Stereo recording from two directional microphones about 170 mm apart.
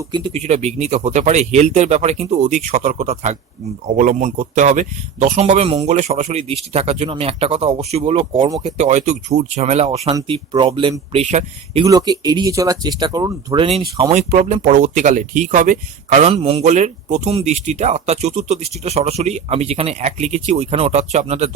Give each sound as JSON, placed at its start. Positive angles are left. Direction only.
{"t": 0.1, "sound": "speech", "side_deg": -40}
{"t": 10.1, "sound": "speech", "side_deg": -25}
{"t": 11.9, "sound": "speech", "side_deg": -20}
{"t": 14.1, "sound": "speech", "side_deg": -40}
{"t": 16.3, "sound": "speech", "side_deg": -35}